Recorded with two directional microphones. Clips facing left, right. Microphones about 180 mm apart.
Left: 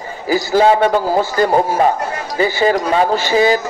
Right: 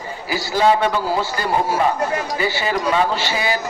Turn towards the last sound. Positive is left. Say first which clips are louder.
# left 8 dB
turn(degrees=45)  # may be behind; listen again after turning